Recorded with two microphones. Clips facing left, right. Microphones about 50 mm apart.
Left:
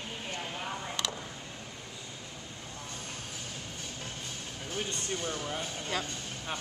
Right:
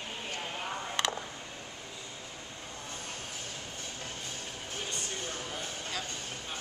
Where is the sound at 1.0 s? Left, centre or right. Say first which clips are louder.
Right 5 dB; right.